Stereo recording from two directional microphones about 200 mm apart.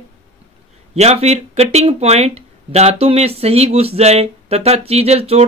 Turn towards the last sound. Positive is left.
turn(degrees=-30)  # may be behind; listen again after turning